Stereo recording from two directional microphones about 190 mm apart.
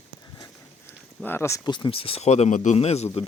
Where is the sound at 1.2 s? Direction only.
15° left (ahead or behind).